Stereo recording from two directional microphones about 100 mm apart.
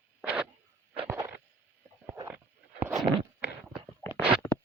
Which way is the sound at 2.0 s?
25° right (ahead or behind).